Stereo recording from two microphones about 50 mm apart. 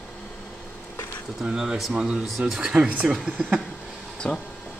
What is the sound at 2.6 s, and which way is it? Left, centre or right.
Speech, centre.